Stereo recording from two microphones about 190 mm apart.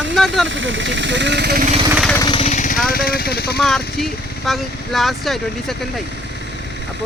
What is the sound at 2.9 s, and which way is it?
Speech, 50° left (ahead or behind).